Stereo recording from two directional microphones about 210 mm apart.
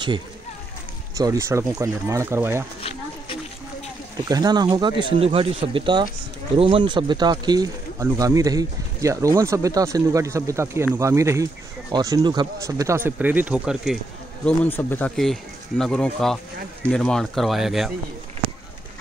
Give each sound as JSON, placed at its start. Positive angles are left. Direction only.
{"t": 1.1, "sound": "speech", "side_deg": -15}
{"t": 4.3, "sound": "speech", "side_deg": -20}
{"t": 14.4, "sound": "speech", "side_deg": 10}